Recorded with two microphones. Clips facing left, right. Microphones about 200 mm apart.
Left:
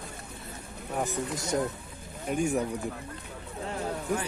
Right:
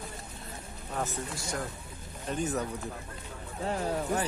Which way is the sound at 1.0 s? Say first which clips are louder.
Left 4 dB; 20° left (ahead or behind).